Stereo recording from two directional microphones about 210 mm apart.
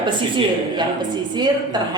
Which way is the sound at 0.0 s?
20° right (ahead or behind).